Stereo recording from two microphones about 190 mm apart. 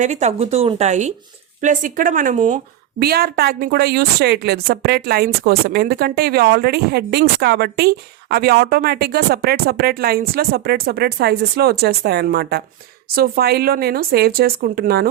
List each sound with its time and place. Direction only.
0.0 s speech: 35° right (ahead or behind)
3.0 s a woman's voice: 55° right (ahead or behind)